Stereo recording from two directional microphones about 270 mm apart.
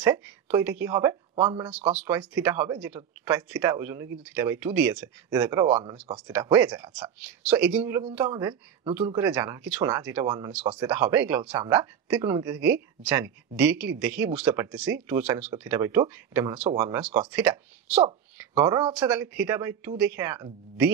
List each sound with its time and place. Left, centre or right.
0.0 s speech: centre
1.7 s speech: centre
18.6 s speech: centre
18.9 s speech: centre